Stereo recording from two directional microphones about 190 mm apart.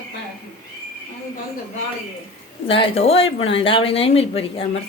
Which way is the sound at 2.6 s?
30° left (ahead or behind).